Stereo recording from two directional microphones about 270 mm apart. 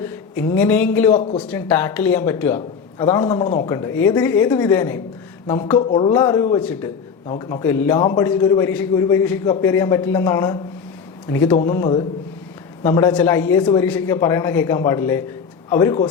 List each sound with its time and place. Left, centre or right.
0.3 s a man's voice: centre
1.2 s speech: left
1.5 s a man's voice: centre